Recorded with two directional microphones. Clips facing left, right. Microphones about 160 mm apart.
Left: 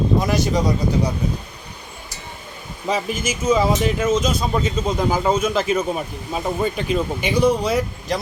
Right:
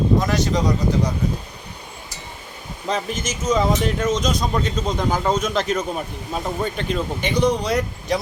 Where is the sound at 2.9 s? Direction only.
10° left (ahead or behind).